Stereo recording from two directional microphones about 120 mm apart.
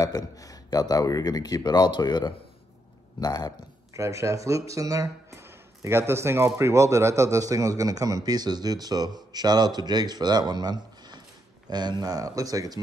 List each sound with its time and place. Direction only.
0.0 s speech: 30° left (ahead or behind)
3.9 s speech: 25° right (ahead or behind)